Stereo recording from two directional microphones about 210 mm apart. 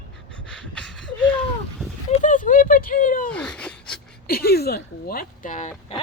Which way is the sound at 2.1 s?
40° left (ahead or behind).